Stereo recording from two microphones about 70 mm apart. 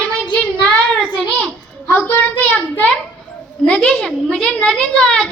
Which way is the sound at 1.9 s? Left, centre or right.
Left.